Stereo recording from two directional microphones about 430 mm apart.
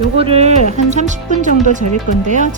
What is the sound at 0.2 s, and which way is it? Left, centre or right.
Speech, centre.